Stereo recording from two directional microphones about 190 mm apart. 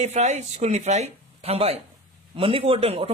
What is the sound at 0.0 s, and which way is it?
Speech, 40° right (ahead or behind).